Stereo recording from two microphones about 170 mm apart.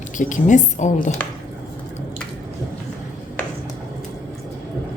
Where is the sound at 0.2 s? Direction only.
50° left (ahead or behind).